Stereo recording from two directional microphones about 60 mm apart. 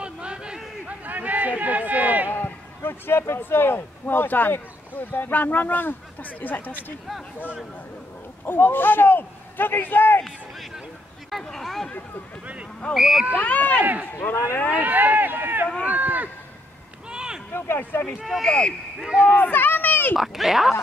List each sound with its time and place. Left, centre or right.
0.0 s a sound: centre
0.8 s a sound: right
2.2 s a man's voice: left
8.5 s speech: left
11.4 s speech: centre
12.9 s speech: centre
13.4 s speech: left
14.7 s speech: right
17.1 s a sound: centre
17.5 s speech: left
18.2 s speech: centre
18.5 s speech: centre
19.3 s a sound: left
20.2 s speech: centre